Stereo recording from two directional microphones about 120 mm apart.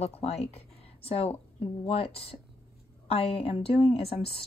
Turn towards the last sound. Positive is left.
turn(degrees=55)  # may be behind; listen again after turning